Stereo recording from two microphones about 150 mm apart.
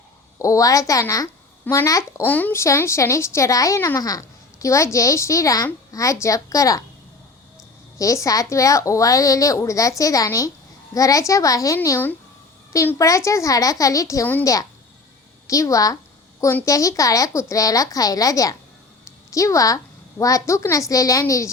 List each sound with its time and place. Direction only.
0.3 s a child's voice: 20° left (ahead or behind)
7.9 s a child's voice: 20° left (ahead or behind)